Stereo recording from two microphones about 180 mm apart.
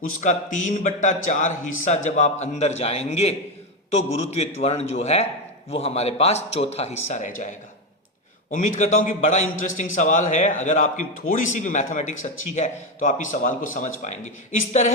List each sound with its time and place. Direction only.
0.2 s a man's voice: 45° left (ahead or behind)